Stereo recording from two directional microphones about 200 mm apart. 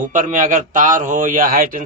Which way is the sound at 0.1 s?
40° right (ahead or behind).